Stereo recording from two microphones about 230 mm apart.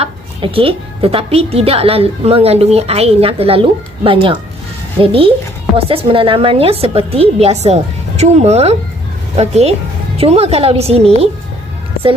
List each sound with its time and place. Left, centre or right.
0.0 s a woman's voice: right
5.7 s a woman's voice: right